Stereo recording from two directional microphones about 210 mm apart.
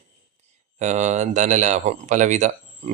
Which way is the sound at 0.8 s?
35° right (ahead or behind).